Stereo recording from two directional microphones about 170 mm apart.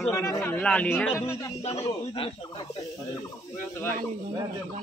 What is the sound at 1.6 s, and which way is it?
Speech, 35° left (ahead or behind).